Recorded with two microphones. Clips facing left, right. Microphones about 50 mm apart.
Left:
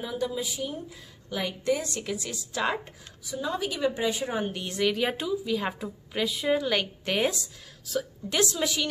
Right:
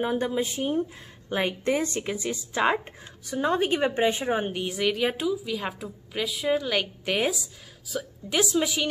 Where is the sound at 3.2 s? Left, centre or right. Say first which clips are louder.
Right 6 dB; right.